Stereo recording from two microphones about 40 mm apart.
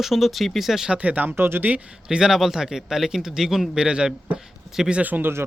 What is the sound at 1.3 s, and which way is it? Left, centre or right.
Speech, right.